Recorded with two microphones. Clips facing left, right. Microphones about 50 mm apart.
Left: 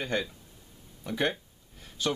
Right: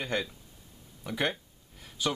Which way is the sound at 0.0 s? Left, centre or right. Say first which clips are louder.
Left 1 dB; centre.